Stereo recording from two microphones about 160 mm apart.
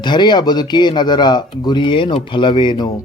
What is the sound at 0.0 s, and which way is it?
Speech, 30° left (ahead or behind).